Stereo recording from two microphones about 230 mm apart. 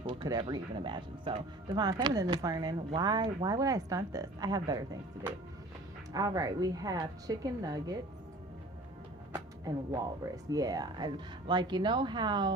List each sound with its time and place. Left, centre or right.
0.0 s speech: right
6.1 s speech: centre
9.3 s speech: centre